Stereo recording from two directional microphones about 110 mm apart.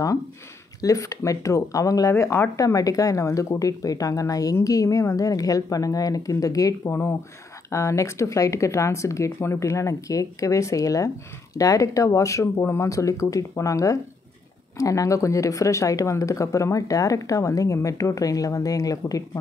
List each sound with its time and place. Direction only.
0.7 s a woman's voice: 30° left (ahead or behind)